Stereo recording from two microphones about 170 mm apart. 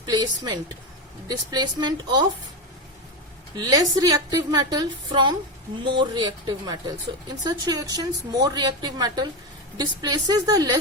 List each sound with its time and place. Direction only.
0.0 s speech: 25° right (ahead or behind)
3.5 s speech: 20° right (ahead or behind)